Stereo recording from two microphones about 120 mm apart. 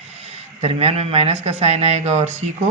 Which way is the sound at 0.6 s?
65° right (ahead or behind).